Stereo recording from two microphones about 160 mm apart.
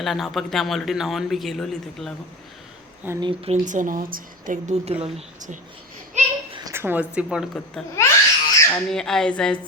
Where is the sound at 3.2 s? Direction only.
30° right (ahead or behind).